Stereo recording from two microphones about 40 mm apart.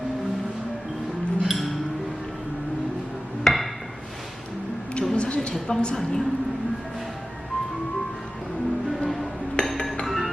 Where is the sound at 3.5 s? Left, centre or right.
Centre.